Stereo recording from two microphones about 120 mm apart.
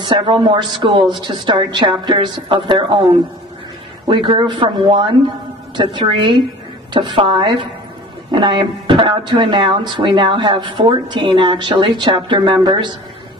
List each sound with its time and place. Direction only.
0.0 s a woman's voice: 45° right (ahead or behind)
4.1 s a woman's voice: 45° right (ahead or behind)